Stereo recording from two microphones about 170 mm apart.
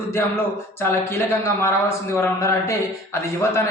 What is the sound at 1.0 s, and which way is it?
A man's voice, 15° left (ahead or behind).